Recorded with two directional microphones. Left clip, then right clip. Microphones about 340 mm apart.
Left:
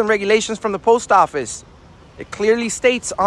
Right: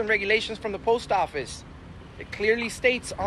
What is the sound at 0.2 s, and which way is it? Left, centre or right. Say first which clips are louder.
Speech: left 8 dB; left.